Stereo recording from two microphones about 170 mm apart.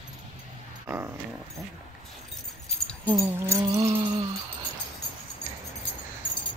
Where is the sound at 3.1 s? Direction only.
15° right (ahead or behind).